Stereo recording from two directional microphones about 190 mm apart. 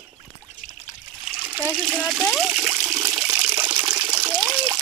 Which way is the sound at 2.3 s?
5° right (ahead or behind).